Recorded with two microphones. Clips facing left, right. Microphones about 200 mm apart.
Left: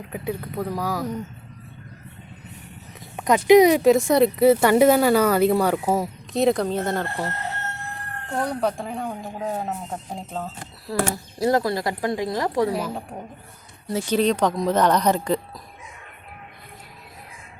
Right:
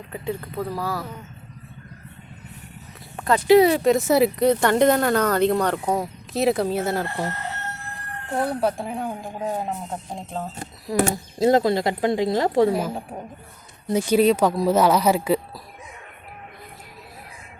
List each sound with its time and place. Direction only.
0.1 s speech: 10° left (ahead or behind)
3.2 s speech: 15° left (ahead or behind)
3.8 s speech: centre (ahead or behind)
4.4 s speech: 5° left (ahead or behind)
8.4 s speech: 5° right (ahead or behind)
10.8 s speech: 20° right (ahead or behind)
13.8 s speech: 15° right (ahead or behind)